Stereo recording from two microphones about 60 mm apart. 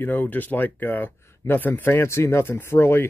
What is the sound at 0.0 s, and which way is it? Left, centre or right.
Speech, left.